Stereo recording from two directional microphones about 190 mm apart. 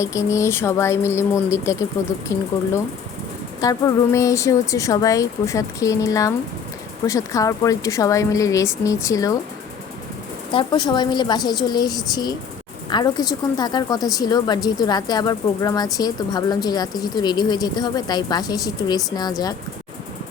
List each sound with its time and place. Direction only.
0.0 s speech: 15° left (ahead or behind)
3.6 s speech: 20° left (ahead or behind)
10.5 s speech: 25° left (ahead or behind)